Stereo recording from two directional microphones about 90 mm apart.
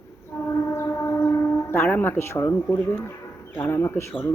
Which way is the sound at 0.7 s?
30° left (ahead or behind).